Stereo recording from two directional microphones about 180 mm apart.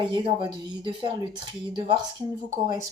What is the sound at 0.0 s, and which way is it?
Speech, 25° right (ahead or behind).